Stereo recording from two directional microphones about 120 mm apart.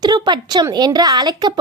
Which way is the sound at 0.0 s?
35° right (ahead or behind).